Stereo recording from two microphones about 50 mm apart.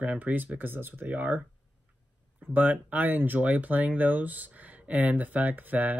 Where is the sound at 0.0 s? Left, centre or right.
Right.